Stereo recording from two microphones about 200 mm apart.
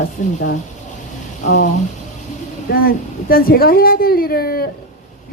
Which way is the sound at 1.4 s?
40° left (ahead or behind).